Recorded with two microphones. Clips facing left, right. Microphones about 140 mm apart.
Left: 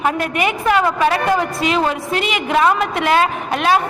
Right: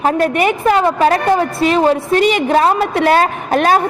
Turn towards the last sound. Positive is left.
turn(degrees=-45)  # may be behind; listen again after turning